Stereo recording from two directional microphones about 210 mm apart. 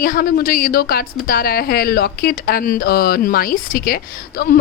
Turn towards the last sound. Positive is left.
turn(degrees=45)  # may be behind; listen again after turning